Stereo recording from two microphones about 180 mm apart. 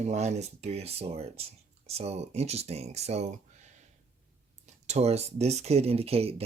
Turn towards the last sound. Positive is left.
turn(degrees=-35)  # may be behind; listen again after turning